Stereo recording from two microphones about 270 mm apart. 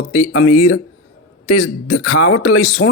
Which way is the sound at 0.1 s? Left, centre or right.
Left.